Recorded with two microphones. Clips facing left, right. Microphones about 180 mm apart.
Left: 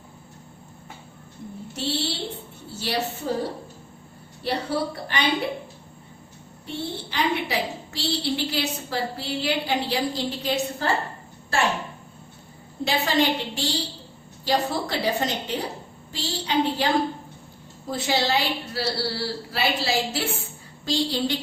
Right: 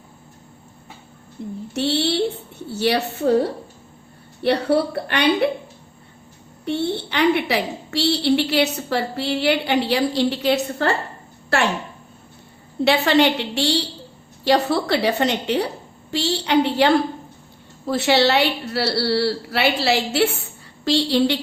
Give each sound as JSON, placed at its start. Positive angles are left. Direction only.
{"t": 1.4, "sound": "a woman's voice", "side_deg": -75}
{"t": 4.4, "sound": "a woman's voice", "side_deg": -65}
{"t": 6.7, "sound": "a woman's voice", "side_deg": -70}
{"t": 12.8, "sound": "a woman's voice", "side_deg": -70}